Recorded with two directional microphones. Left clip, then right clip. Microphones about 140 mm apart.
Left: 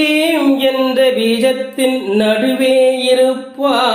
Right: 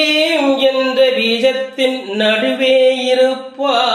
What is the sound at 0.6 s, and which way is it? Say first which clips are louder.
Music: even; 30° left (ahead or behind).